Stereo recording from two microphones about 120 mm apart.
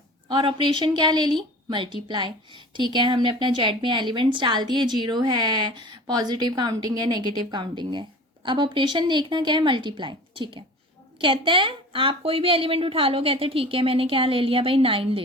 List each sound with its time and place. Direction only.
0.3 s a woman's voice: 40° right (ahead or behind)